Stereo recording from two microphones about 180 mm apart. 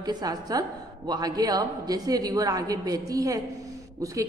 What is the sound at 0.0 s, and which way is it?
A woman's voice, 20° right (ahead or behind).